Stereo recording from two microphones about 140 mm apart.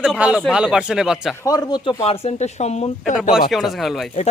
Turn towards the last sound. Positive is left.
turn(degrees=0)  # may be behind; listen again after turning